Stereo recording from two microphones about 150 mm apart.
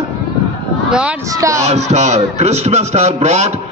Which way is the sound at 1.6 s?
50° right (ahead or behind).